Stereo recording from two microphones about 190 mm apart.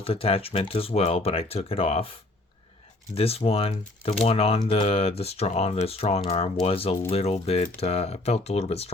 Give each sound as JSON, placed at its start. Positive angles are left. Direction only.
{"t": 0.0, "sound": "speech", "side_deg": 30}
{"t": 3.2, "sound": "speech", "side_deg": 30}